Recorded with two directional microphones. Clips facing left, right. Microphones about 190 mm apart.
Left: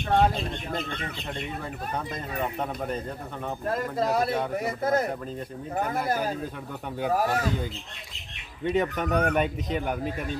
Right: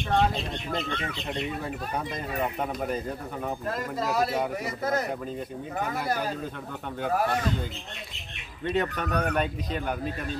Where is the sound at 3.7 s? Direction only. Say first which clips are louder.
Left 7 dB; 50° left (ahead or behind).